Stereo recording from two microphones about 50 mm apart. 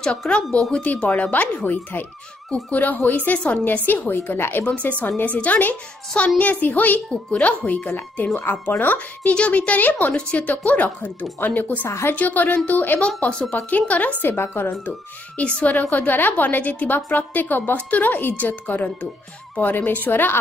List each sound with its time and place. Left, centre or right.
0.3 s speech: left
1.0 s a woman's voice: left
4.4 s a woman's voice: left
4.6 s a woman's voice: left
6.1 s a woman's voice: left
7.1 s speech: left
8.4 s a woman's voice: left
9.3 s a woman's voice: left
11.9 s a woman's voice: left
12.2 s a woman's voice: left
13.3 s speech: left
14.2 s a woman's voice: left
14.9 s a woman's voice: left